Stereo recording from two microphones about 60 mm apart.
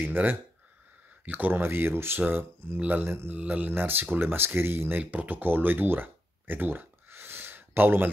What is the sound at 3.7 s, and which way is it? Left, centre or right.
Speech, right.